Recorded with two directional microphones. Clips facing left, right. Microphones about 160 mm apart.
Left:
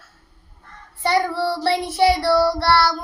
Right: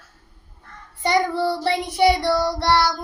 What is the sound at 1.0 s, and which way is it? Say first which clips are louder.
Child singing: even; 20° right (ahead or behind).